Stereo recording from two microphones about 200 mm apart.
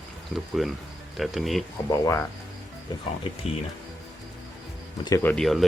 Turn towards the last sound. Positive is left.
turn(degrees=0)  # may be behind; listen again after turning